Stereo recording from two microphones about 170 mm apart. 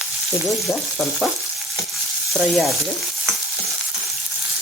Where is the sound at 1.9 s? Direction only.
Centre (ahead or behind).